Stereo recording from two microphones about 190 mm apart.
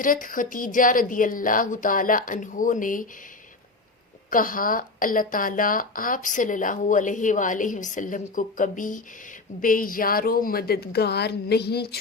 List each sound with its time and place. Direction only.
0.0 s speech: 45° left (ahead or behind)
4.3 s speech: 45° left (ahead or behind)